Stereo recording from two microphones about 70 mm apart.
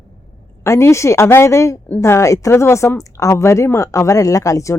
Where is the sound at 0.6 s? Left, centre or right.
Left.